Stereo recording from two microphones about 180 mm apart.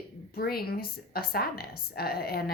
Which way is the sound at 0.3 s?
60° left (ahead or behind).